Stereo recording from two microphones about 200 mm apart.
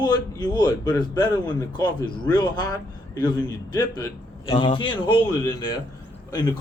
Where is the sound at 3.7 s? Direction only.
20° left (ahead or behind).